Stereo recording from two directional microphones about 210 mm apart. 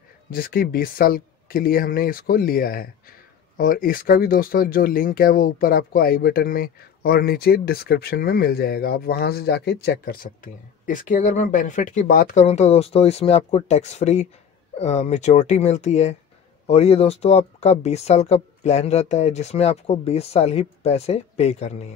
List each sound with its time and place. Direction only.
0.3 s speech: 45° left (ahead or behind)